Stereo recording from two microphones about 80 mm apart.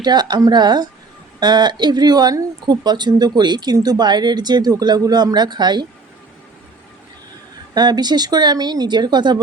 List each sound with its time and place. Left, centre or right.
0.0 s speech: right
7.7 s speech: right